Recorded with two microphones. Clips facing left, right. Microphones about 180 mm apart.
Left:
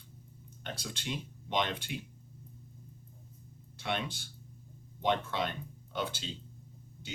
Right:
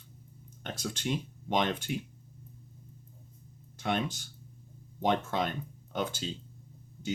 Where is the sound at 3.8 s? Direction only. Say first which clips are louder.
Right 4 dB; 45° right (ahead or behind).